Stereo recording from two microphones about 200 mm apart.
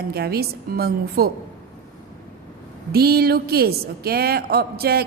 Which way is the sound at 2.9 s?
50° right (ahead or behind).